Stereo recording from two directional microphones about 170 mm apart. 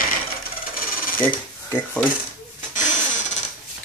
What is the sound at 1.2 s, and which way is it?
Speech, 10° left (ahead or behind).